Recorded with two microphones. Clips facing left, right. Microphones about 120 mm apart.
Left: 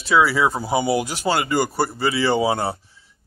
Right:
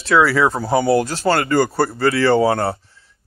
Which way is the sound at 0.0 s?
5° left (ahead or behind).